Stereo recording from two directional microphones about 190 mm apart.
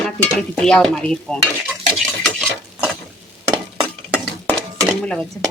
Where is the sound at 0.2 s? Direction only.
5° left (ahead or behind).